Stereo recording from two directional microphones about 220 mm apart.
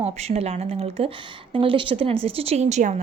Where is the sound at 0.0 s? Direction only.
30° right (ahead or behind).